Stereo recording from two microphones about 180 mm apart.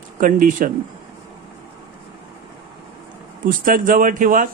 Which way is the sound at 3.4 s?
50° right (ahead or behind).